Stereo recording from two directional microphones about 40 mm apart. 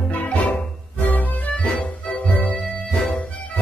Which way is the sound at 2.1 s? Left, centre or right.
Left.